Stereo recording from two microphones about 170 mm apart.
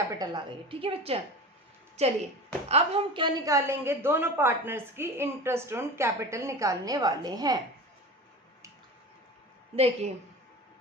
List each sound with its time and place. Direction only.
0.1 s a woman's voice: 25° right (ahead or behind)
9.7 s a woman's voice: 35° right (ahead or behind)